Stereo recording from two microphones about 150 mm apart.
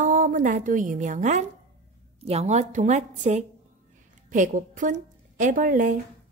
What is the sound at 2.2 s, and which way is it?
A woman's voice, 45° right (ahead or behind).